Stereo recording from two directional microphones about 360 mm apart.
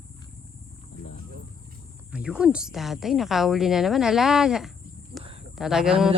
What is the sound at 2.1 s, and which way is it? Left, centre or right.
Speech, centre.